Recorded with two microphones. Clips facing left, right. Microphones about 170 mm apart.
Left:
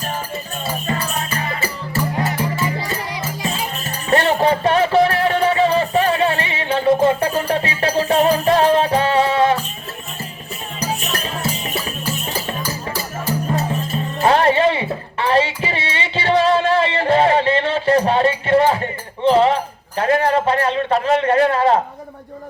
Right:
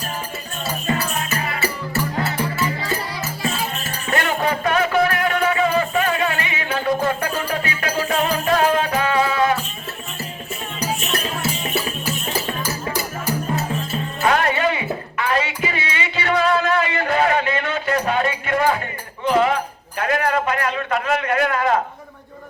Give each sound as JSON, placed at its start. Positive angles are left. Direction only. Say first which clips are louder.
{"t": 0.9, "sound": "music", "louder": "right 3 dB", "side_deg": 30}
{"t": 2.1, "sound": "music", "louder": "left 2 dB", "side_deg": 20}
{"t": 14.2, "sound": "music", "louder": "left 5 dB", "side_deg": 30}